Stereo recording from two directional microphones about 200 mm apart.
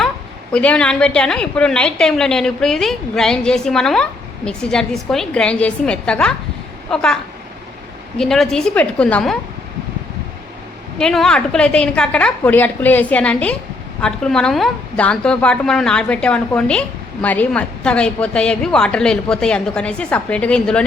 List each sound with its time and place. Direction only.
0.5 s a woman's voice: 5° left (ahead or behind)
8.2 s a woman's voice: centre (ahead or behind)
10.9 s a woman's voice: centre (ahead or behind)